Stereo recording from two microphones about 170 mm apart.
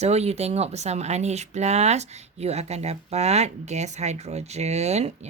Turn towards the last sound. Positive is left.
turn(degrees=-40)  # may be behind; listen again after turning